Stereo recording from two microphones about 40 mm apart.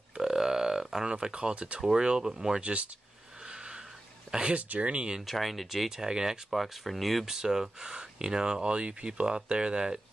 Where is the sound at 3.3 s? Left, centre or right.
Right.